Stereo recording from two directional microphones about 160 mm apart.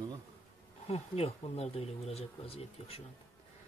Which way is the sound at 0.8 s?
40° left (ahead or behind).